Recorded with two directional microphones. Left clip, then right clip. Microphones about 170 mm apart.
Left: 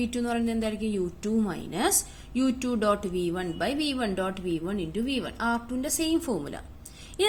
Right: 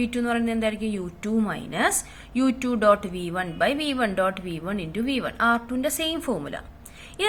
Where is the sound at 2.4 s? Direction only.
45° left (ahead or behind).